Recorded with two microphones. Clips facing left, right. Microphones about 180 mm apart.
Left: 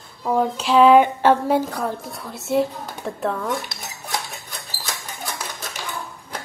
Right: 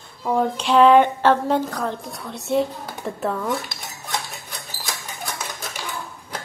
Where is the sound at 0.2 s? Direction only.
5° left (ahead or behind).